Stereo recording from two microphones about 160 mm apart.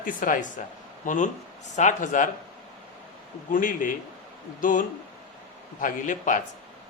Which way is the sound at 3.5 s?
55° left (ahead or behind).